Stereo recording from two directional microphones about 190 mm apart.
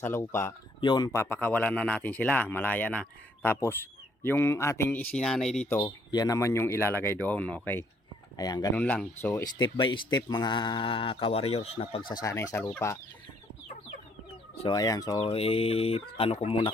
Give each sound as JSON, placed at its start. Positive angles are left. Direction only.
{"t": 0.0, "sound": "speech", "side_deg": 15}
{"t": 5.8, "sound": "speech", "side_deg": 20}
{"t": 8.4, "sound": "speech", "side_deg": 20}
{"t": 8.8, "sound": "speech", "side_deg": 5}
{"t": 12.2, "sound": "speech", "side_deg": 15}
{"t": 14.6, "sound": "speech", "side_deg": 20}
{"t": 15.2, "sound": "speech", "side_deg": 30}